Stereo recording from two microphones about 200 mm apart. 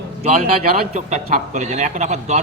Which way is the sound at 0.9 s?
35° right (ahead or behind).